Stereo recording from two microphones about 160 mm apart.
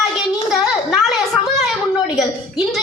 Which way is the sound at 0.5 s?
Centre (ahead or behind).